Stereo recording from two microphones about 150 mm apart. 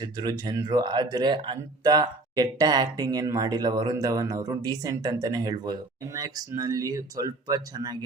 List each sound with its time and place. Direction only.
0.0 s speech: 25° right (ahead or behind)